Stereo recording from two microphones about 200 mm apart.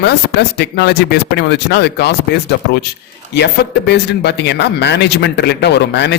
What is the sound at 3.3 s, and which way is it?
A man's voice, 60° left (ahead or behind).